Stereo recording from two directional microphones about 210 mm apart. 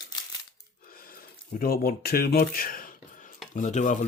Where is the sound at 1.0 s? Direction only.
45° left (ahead or behind).